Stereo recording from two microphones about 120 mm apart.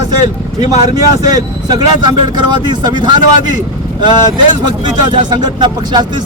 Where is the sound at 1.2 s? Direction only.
30° right (ahead or behind).